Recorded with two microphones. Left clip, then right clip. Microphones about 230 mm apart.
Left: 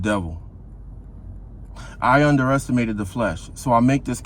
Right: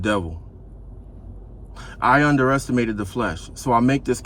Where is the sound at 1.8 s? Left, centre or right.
Left.